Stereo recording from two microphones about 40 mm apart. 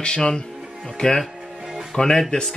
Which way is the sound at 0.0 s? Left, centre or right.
Left.